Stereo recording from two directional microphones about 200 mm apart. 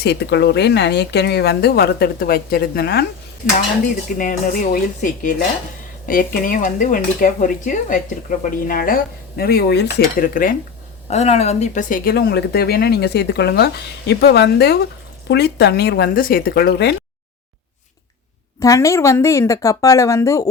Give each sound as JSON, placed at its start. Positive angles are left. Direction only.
{"t": 0.0, "sound": "speech", "side_deg": 55}
{"t": 4.2, "sound": "speech", "side_deg": 40}
{"t": 11.1, "sound": "speech", "side_deg": 30}
{"t": 18.6, "sound": "a woman's voice", "side_deg": 15}